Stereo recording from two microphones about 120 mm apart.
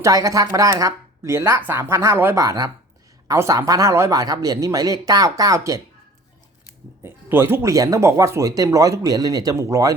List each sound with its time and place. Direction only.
0.0 s speech: 30° right (ahead or behind)
7.0 s speech: 20° right (ahead or behind)